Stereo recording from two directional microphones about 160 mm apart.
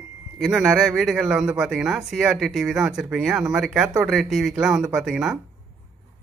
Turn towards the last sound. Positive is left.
turn(degrees=0)  # may be behind; listen again after turning